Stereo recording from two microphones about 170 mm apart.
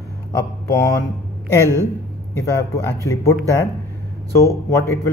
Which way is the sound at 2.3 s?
15° left (ahead or behind).